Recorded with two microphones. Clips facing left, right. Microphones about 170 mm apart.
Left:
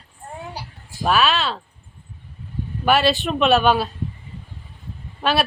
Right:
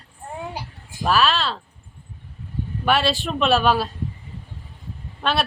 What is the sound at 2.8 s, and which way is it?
Speech, centre (ahead or behind).